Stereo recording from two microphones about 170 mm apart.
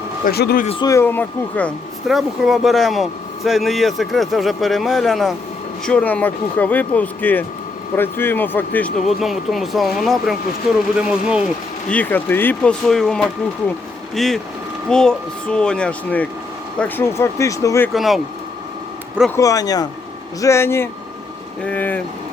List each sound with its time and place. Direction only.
0.3 s speech: 65° left (ahead or behind)
0.8 s speech: 20° left (ahead or behind)
2.0 s speech: centre (ahead or behind)
11.9 s speech: 10° left (ahead or behind)
17.9 s speech: centre (ahead or behind)
19.4 s speech: 20° left (ahead or behind)